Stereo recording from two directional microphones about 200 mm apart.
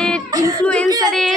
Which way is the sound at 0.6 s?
5° left (ahead or behind).